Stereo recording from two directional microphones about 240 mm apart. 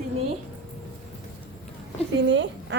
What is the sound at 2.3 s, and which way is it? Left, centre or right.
Speech, right.